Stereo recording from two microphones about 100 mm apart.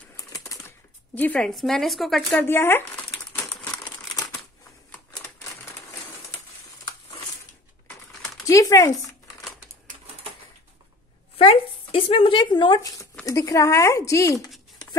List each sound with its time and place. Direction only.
0.2 s a sound: 35° left (ahead or behind)
0.7 s zipper: 20° left (ahead or behind)
1.5 s speech: centre (ahead or behind)
2.4 s speech: 20° left (ahead or behind)
8.5 s speech: 35° left (ahead or behind)
11.3 s speech: 70° left (ahead or behind); by 12.8 s 50° left (ahead or behind)
12.8 s speech: 35° left (ahead or behind)